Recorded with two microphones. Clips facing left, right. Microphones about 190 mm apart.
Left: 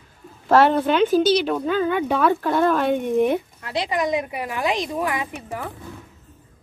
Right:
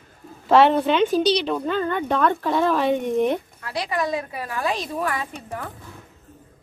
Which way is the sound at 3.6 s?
25° left (ahead or behind).